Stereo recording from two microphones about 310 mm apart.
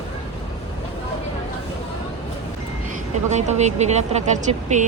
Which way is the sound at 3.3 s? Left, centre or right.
Right.